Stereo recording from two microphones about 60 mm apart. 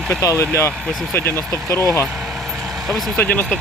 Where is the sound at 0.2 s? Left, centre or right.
Left.